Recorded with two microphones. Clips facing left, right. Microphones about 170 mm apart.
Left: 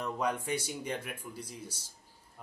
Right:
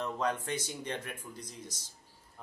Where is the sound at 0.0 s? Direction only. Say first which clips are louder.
Even; 10° left (ahead or behind).